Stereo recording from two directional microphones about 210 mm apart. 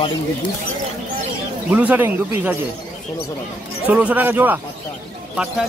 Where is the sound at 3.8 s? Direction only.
10° right (ahead or behind).